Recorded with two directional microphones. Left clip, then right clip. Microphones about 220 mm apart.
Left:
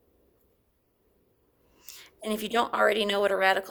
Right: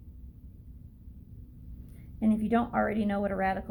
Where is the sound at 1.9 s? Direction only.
45° left (ahead or behind).